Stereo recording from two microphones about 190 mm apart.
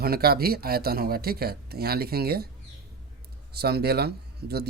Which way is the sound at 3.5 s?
55° right (ahead or behind).